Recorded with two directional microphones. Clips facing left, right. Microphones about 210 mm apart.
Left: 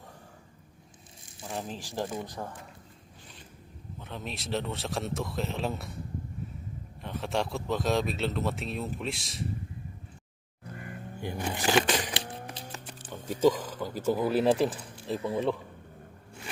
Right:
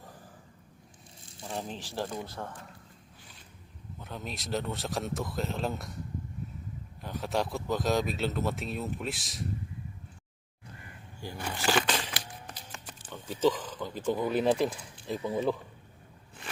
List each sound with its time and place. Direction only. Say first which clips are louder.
1.4 s speech: left 1 dB; centre (ahead or behind)
1.8 s speech: left 1 dB; 15° left (ahead or behind)
4.0 s speech: left 1 dB; centre (ahead or behind)
7.0 s speech: even; centre (ahead or behind)
11.2 s speech: left 4 dB; 20° left (ahead or behind)
13.4 s speech: left 3 dB; 10° left (ahead or behind)